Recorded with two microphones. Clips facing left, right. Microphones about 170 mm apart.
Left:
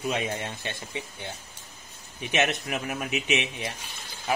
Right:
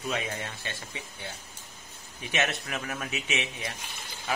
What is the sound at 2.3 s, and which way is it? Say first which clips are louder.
Speech: left 4 dB; 20° left (ahead or behind).